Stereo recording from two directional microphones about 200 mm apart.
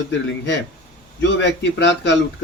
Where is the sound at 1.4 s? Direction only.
60° left (ahead or behind).